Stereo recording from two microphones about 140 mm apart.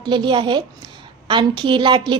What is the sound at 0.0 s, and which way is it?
A woman's voice, 35° right (ahead or behind).